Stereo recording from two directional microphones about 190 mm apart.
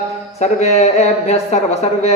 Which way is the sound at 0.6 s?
35° left (ahead or behind).